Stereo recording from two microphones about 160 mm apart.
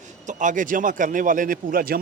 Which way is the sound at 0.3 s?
50° right (ahead or behind).